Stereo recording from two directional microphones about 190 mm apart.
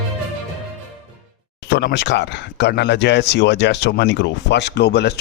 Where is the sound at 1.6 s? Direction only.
65° left (ahead or behind).